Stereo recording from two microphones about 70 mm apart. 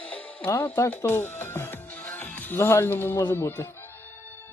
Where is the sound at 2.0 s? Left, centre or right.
Left.